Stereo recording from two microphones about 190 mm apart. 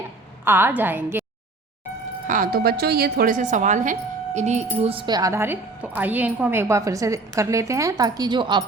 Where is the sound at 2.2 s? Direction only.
45° right (ahead or behind).